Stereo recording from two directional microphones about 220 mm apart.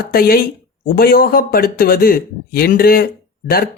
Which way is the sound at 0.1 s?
40° left (ahead or behind).